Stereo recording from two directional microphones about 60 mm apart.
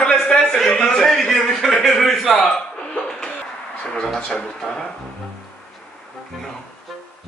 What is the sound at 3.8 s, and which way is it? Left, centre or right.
A man's voice, centre.